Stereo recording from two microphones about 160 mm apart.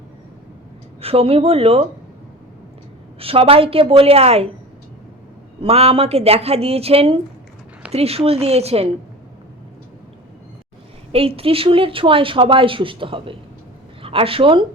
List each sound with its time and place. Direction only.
1.0 s speech: 35° right (ahead or behind)
3.2 s speech: 35° right (ahead or behind)
5.6 s speech: 40° right (ahead or behind)
11.1 s speech: 35° right (ahead or behind)